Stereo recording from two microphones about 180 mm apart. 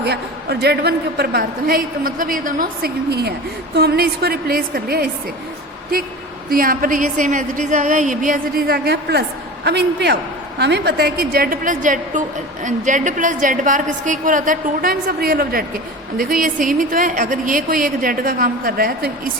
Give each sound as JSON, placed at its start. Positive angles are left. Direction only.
{"t": 0.6, "sound": "a woman's voice", "side_deg": -65}
{"t": 6.5, "sound": "a woman's voice", "side_deg": -55}